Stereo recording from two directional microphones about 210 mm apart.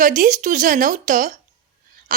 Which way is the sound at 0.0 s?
40° right (ahead or behind).